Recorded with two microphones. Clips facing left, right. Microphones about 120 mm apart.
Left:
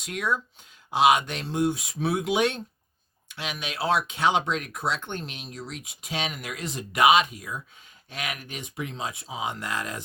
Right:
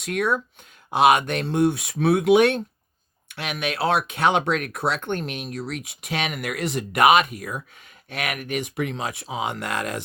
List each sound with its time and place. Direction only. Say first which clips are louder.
0.0 s speech: right 5 dB; 60° right (ahead or behind)